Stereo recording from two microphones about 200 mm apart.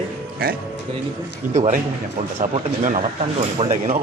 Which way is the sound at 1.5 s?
35° right (ahead or behind).